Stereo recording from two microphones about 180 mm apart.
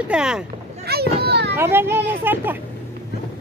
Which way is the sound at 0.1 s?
5° right (ahead or behind).